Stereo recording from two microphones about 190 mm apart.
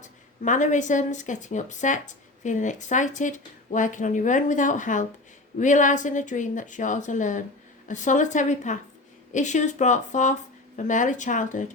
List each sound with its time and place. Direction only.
0.0 s speech: 40° left (ahead or behind)